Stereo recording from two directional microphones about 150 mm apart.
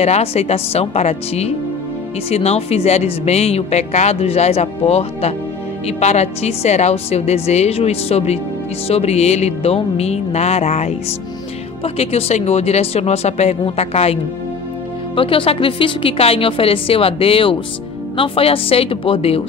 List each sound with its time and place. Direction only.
0.0 s a woman's voice: 45° left (ahead or behind)